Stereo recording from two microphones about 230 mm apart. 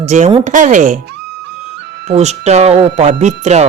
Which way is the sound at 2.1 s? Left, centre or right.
Right.